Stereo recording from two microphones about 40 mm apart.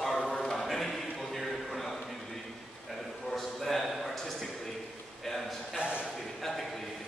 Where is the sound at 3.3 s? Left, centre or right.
Centre.